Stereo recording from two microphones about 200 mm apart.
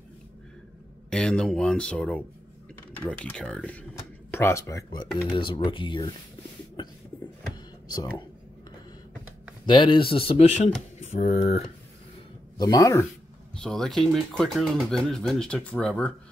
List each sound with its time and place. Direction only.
1.1 s speech: 5° left (ahead or behind)
5.0 s speech: 5° left (ahead or behind)
5.3 s speech: 25° left (ahead or behind)
9.7 s speech: 25° left (ahead or behind)
12.5 s speech: 20° left (ahead or behind)
13.6 s speech: 5° left (ahead or behind)